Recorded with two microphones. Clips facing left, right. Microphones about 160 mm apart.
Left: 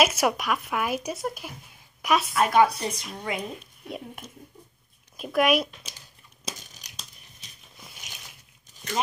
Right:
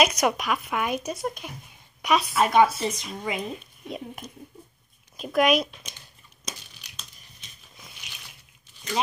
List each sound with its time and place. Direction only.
0.0 s speech: 5° left (ahead or behind)
5.9 s crumpling: 35° left (ahead or behind)